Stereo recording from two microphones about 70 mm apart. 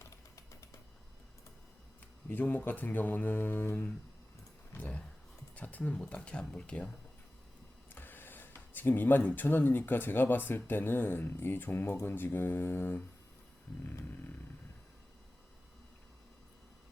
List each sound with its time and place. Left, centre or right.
0.0 s music: left
2.3 s speech: left
4.8 s a sound: centre
5.5 s speech: left
7.9 s speech: left